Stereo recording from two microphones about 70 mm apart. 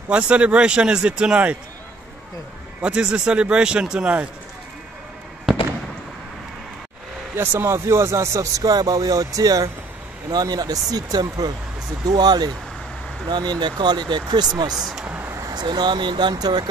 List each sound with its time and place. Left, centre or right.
0.1 s speech: centre
2.8 s speech: centre
7.6 s speech: right
13.3 s speech: right
14.7 s speech: centre
15.0 s a sound: right
15.5 s speech: right